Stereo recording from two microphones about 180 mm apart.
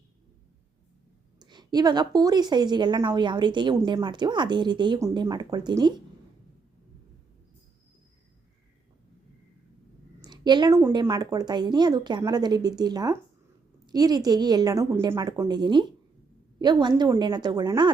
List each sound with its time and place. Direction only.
1.4 s a woman's voice: 25° right (ahead or behind)
10.2 s a woman's voice: 25° right (ahead or behind)